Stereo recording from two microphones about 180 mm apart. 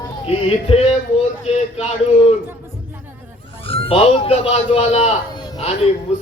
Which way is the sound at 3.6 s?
30° left (ahead or behind).